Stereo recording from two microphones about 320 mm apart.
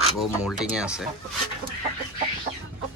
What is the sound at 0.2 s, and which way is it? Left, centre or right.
Speech, centre.